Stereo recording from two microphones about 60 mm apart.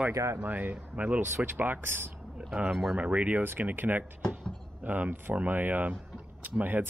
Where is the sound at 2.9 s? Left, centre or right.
Centre.